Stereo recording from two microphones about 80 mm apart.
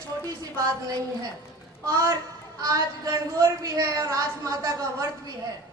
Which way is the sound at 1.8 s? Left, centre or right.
Right.